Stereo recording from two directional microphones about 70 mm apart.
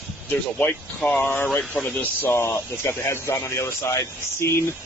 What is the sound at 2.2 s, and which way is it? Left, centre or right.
A man's voice, left.